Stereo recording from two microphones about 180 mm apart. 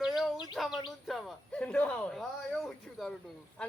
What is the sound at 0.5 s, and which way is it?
Bird, centre (ahead or behind).